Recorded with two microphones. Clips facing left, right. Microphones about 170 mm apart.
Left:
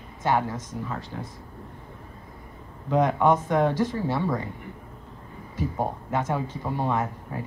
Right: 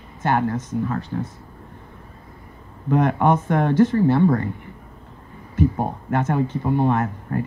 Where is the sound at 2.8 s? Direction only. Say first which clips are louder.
Right 2 dB; 55° right (ahead or behind).